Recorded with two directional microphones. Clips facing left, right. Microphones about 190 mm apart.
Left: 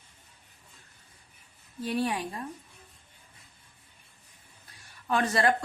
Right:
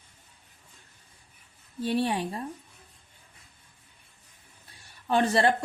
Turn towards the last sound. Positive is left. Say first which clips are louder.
# right 3 dB
turn(degrees=-30)  # may be behind; listen again after turning